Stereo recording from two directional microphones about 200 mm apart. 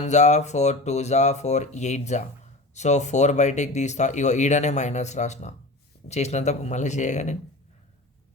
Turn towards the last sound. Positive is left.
turn(degrees=35)  # may be behind; listen again after turning